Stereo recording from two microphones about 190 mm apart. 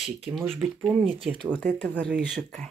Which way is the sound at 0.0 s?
5° right (ahead or behind).